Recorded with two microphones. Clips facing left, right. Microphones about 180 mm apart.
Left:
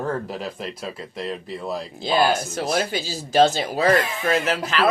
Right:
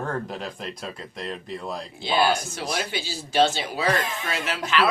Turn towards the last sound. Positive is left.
turn(degrees=40)  # may be behind; listen again after turning